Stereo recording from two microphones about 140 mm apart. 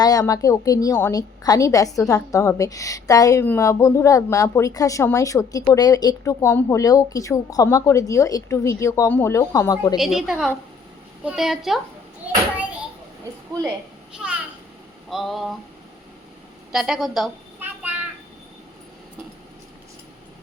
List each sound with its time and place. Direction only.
0.0 s speech: 25° left (ahead or behind)
10.0 s a woman's voice: centre (ahead or behind)
14.2 s a child's voice: 10° right (ahead or behind)
16.7 s a woman's voice: 5° right (ahead or behind)